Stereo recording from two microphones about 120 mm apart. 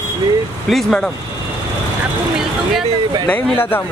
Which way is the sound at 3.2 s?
15° left (ahead or behind).